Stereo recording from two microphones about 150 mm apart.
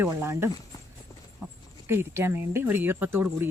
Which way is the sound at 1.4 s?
10° right (ahead or behind).